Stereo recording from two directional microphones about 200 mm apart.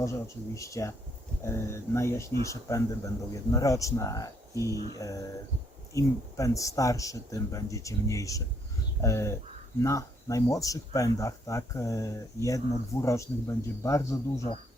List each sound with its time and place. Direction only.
0.0 s speech: 15° left (ahead or behind)